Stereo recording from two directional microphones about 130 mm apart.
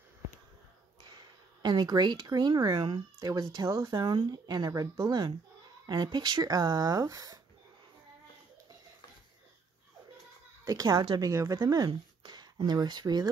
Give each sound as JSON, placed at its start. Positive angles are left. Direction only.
{"t": 1.1, "sound": "speech", "side_deg": -35}
{"t": 10.6, "sound": "speech", "side_deg": -30}